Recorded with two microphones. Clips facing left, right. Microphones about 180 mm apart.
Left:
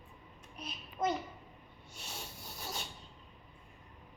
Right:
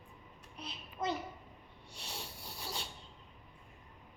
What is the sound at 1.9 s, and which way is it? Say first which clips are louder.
Rub: right 1 dB; 35° right (ahead or behind).